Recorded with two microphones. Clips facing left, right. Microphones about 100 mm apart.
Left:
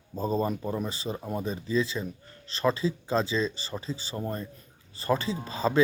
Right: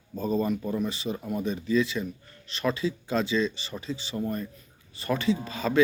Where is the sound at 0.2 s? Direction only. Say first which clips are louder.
Right 1 dB; 35° left (ahead or behind).